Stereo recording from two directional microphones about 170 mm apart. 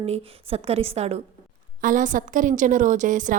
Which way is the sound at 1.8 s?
50° right (ahead or behind).